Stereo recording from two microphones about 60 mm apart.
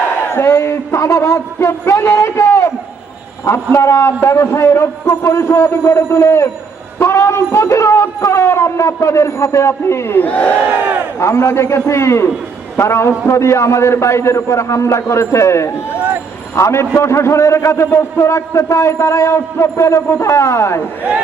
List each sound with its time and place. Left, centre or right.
0.2 s a sound: left
3.4 s a man's voice: left
10.1 s battle cry: left
10.7 s speech: right
11.2 s a man's voice: left